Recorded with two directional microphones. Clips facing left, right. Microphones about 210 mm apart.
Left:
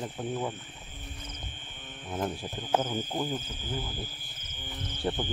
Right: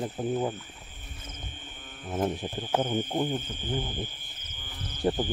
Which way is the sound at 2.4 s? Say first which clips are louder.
Right 1 dB; 15° right (ahead or behind).